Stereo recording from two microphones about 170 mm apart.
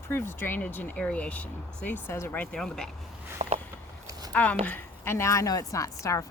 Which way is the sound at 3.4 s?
45° right (ahead or behind).